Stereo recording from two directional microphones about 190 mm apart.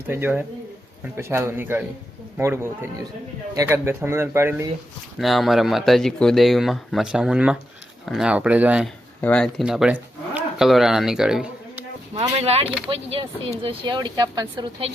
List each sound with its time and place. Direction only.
0.1 s speech: 10° right (ahead or behind)
5.2 s speech: centre (ahead or behind)
9.2 s speech: 5° left (ahead or behind)
12.4 s speech: 30° right (ahead or behind)
12.6 s speech: 5° right (ahead or behind)
12.9 s speech: 30° right (ahead or behind)